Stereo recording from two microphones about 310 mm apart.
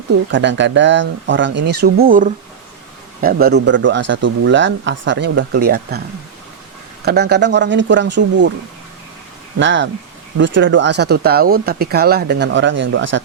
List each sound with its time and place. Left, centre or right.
0.3 s speech: right
7.0 s speech: right
9.6 s speech: right